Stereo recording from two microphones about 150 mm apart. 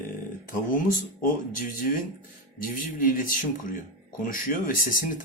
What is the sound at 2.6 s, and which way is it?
Speech, 65° left (ahead or behind).